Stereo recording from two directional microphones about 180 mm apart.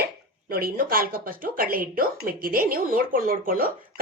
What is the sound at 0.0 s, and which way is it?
Speech, 55° right (ahead or behind).